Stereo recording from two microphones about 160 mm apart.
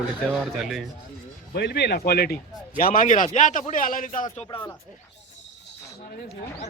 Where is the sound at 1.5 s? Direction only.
90° left; by 4.4 s 50° left (ahead or behind).